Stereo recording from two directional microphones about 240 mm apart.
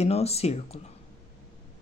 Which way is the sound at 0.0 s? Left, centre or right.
Left.